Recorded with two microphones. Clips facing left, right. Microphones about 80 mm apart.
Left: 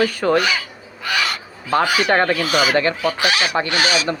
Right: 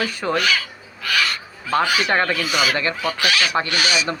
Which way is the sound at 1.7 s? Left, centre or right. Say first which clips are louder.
Left 2 dB; centre.